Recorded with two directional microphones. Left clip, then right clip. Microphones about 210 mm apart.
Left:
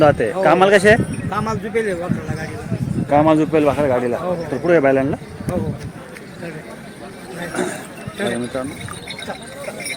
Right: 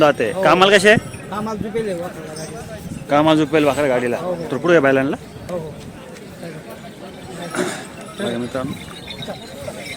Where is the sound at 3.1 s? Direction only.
Centre (ahead or behind).